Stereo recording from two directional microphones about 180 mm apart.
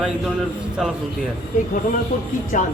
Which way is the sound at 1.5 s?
45° left (ahead or behind).